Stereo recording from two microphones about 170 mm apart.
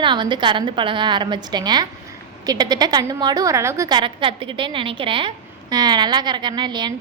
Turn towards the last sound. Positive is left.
turn(degrees=-25)  # may be behind; listen again after turning